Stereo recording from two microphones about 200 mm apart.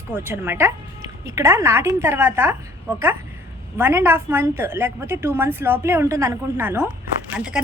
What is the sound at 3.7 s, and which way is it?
A woman's voice, 10° right (ahead or behind).